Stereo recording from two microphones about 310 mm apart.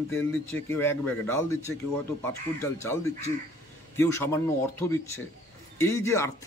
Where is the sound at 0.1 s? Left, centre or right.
Centre.